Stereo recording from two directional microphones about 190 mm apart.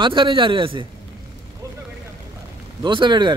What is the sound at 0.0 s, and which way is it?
Speech, 25° right (ahead or behind).